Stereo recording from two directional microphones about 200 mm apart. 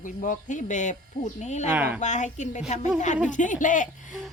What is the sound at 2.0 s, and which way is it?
Speech, 35° left (ahead or behind).